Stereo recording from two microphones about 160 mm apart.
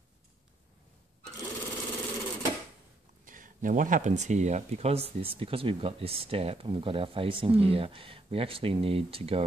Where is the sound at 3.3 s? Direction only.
55° right (ahead or behind).